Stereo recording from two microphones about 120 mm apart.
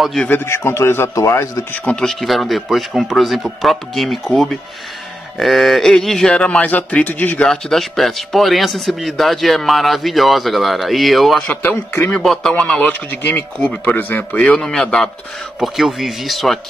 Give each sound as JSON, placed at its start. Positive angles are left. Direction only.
{"t": 0.0, "sound": "speech", "side_deg": 0}
{"t": 0.3, "sound": "a man's voice", "side_deg": 20}
{"t": 1.7, "sound": "a man's voice", "side_deg": 10}
{"t": 7.4, "sound": "speech", "side_deg": 5}
{"t": 11.4, "sound": "a man's voice", "side_deg": 15}